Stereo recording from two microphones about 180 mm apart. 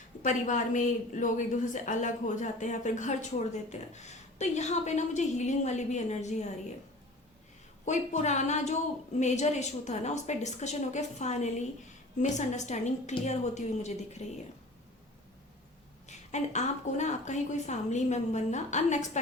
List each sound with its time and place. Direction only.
0.2 s a woman's voice: 45° left (ahead or behind)
7.9 s a woman's voice: 40° left (ahead or behind)
16.0 s a woman's voice: 40° left (ahead or behind)